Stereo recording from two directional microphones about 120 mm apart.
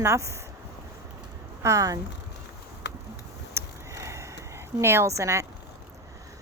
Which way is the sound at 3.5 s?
25° right (ahead or behind).